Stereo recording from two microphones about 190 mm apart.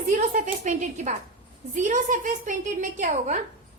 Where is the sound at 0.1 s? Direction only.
40° right (ahead or behind).